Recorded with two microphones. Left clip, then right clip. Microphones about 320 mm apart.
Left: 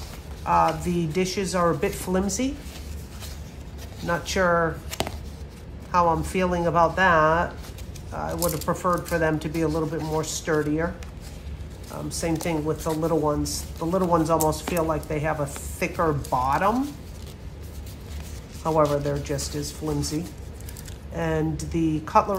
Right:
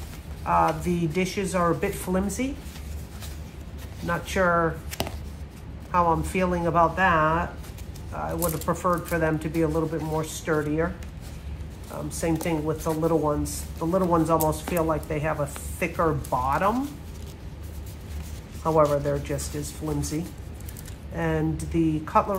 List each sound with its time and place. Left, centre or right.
0.5 s speech: centre
4.0 s speech: centre
11.9 s speech: centre
18.6 s speech: centre
21.2 s speech: centre